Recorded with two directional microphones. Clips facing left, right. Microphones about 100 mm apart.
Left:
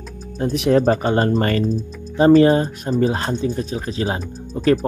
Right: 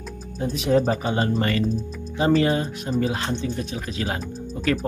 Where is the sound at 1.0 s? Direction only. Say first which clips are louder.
Left 5 dB; 45° left (ahead or behind).